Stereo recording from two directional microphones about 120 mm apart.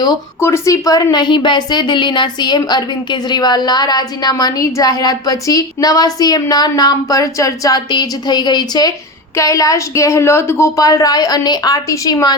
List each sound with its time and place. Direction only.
0.0 s a woman's voice: 25° left (ahead or behind)